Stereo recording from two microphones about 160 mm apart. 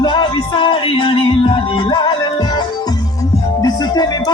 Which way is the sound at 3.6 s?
25° left (ahead or behind).